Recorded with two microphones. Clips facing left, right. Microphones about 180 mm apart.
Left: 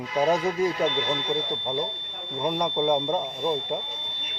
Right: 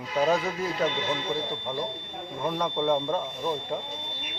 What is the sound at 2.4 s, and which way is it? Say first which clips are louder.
Speech: left 3 dB; 15° left (ahead or behind).